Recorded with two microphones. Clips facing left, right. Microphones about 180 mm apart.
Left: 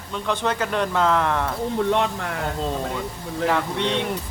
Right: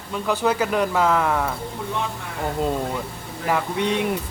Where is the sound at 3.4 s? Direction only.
10° right (ahead or behind).